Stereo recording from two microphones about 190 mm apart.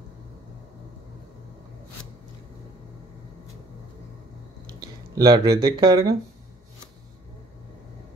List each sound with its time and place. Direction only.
4.7 s speech: 20° right (ahead or behind)